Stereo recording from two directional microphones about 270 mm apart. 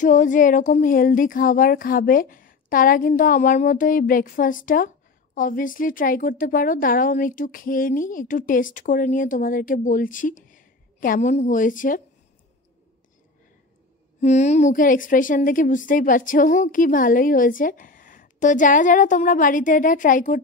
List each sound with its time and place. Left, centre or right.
0.0 s speech: left
14.2 s speech: left